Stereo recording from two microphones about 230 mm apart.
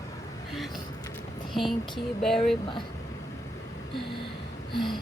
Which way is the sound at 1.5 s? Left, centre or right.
Centre.